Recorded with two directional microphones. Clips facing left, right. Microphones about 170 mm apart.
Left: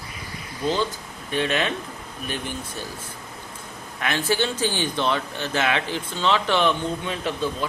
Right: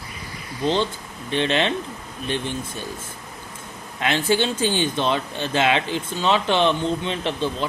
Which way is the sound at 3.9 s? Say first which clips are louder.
Right 3 dB; 20° right (ahead or behind).